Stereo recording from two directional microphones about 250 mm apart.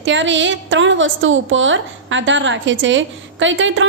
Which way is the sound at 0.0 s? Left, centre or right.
Right.